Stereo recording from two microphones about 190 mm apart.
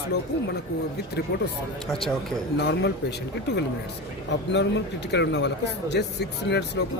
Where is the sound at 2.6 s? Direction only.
65° left (ahead or behind).